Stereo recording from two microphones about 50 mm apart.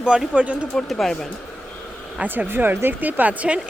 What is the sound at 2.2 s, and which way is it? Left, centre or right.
Speech, right.